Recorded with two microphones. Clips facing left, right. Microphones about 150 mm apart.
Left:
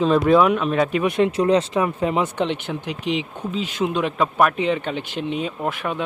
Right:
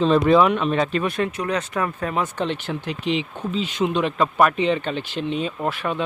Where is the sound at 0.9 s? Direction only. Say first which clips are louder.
Left 4 dB; 15° left (ahead or behind).